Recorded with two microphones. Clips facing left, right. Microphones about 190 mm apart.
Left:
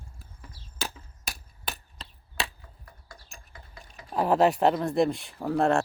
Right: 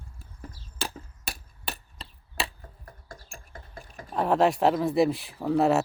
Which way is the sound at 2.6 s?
45° right (ahead or behind).